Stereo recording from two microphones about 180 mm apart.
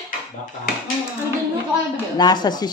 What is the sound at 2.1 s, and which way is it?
Speech, 20° left (ahead or behind).